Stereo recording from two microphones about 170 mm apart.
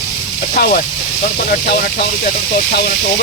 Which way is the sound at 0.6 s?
65° left (ahead or behind).